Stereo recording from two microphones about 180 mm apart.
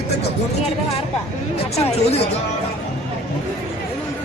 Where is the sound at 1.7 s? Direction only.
35° left (ahead or behind).